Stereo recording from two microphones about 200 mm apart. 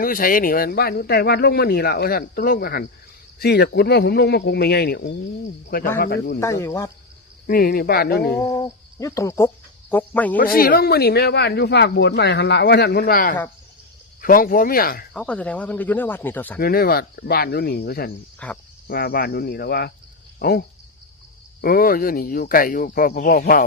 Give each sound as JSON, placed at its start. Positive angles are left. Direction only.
{"t": 0.0, "sound": "a man's voice", "side_deg": 45}
{"t": 6.4, "sound": "speech", "side_deg": 15}
{"t": 7.4, "sound": "a man's voice", "side_deg": 45}
{"t": 8.5, "sound": "speech", "side_deg": 15}
{"t": 10.3, "sound": "a man's voice", "side_deg": 45}
{"t": 15.1, "sound": "speech", "side_deg": 5}
{"t": 16.6, "sound": "a man's voice", "side_deg": 50}
{"t": 18.4, "sound": "cricket", "side_deg": 5}
{"t": 18.9, "sound": "a man's voice", "side_deg": 50}